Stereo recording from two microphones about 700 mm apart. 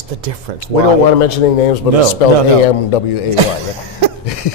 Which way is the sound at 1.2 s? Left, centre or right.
Left.